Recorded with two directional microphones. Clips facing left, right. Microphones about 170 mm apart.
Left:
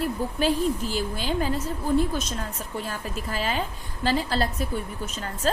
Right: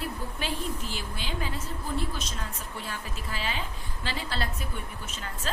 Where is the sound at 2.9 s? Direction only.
45° left (ahead or behind).